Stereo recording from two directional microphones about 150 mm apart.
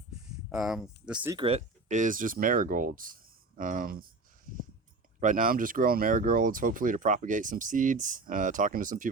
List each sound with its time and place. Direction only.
0.5 s speech: 5° right (ahead or behind)
1.4 s speech: 40° right (ahead or behind)
1.9 s speech: 60° right (ahead or behind)
5.2 s speech: 60° right (ahead or behind)